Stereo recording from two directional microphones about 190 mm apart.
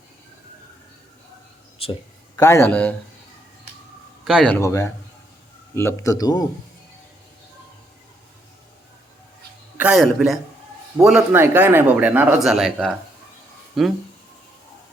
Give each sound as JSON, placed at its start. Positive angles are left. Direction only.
{"t": 1.8, "sound": "speech", "side_deg": 30}
{"t": 2.3, "sound": "a man's voice", "side_deg": 15}
{"t": 4.3, "sound": "a man's voice", "side_deg": 5}
{"t": 9.7, "sound": "speech", "side_deg": -5}